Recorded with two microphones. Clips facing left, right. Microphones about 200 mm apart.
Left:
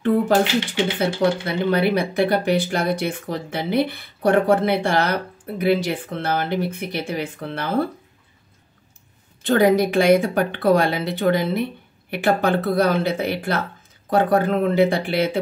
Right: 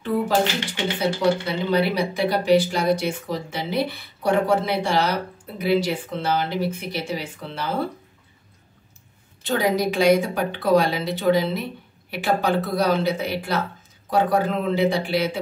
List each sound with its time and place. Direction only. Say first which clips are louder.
0.9 s speech: right 1 dB; 55° left (ahead or behind)
9.4 s speech: left 5 dB; 55° left (ahead or behind)